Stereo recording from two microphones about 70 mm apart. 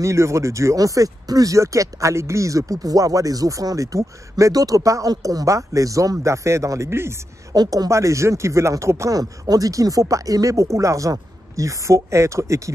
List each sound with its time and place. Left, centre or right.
0.0 s speech: right
7.5 s a woman's voice: right
7.9 s speech: right